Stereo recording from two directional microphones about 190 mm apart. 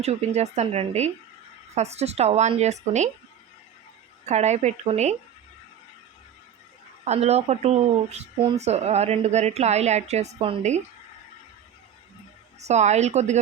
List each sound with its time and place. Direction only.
0.0 s speech: 35° right (ahead or behind)
4.3 s speech: 35° right (ahead or behind)
7.0 s speech: 35° right (ahead or behind)
12.5 s speech: 35° right (ahead or behind)